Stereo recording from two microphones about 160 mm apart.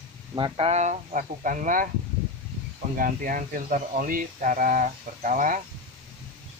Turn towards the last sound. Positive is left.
turn(degrees=-55)  # may be behind; listen again after turning